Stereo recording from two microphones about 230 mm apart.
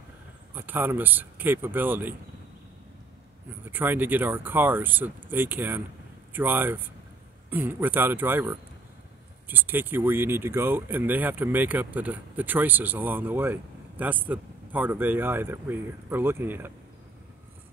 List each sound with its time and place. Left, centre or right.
0.6 s speech: centre
3.6 s speech: centre